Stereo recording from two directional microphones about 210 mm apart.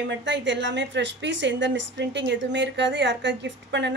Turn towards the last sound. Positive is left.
turn(degrees=-55)  # may be behind; listen again after turning